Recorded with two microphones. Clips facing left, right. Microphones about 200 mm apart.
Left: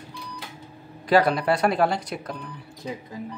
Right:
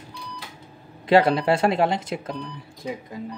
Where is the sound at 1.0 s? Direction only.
25° right (ahead or behind).